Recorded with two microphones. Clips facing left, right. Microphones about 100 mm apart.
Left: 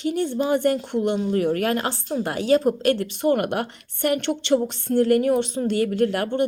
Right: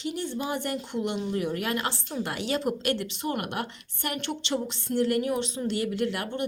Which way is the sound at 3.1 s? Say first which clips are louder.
Left 10 dB; 55° left (ahead or behind).